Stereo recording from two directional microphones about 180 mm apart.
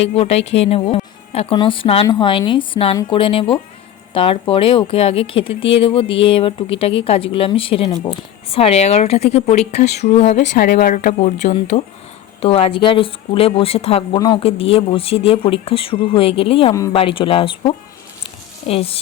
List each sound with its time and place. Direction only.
0.1 s speech: 35° left (ahead or behind)
10.5 s speech: 55° left (ahead or behind); by 17.7 s 30° left (ahead or behind)